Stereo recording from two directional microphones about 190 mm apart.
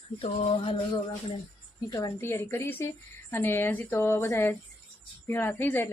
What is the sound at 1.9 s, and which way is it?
A woman's voice, 20° left (ahead or behind).